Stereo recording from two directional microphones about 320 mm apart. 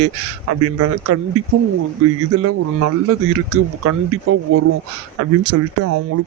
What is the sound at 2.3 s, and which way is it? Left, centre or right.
Speech, right.